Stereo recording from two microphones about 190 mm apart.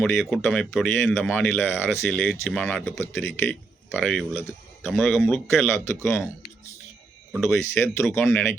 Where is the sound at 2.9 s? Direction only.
15° left (ahead or behind).